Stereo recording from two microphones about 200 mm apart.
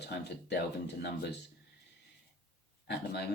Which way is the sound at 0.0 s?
55° left (ahead or behind).